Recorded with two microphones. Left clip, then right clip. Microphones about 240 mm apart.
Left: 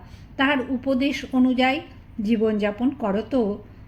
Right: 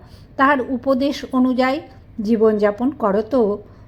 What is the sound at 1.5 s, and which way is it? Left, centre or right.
Speech, centre.